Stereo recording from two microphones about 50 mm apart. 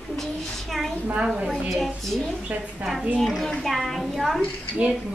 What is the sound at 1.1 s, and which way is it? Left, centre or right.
Speech, centre.